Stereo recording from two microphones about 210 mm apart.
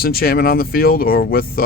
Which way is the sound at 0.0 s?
45° left (ahead or behind).